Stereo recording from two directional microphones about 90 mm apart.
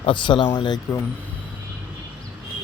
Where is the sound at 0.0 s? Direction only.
65° left (ahead or behind).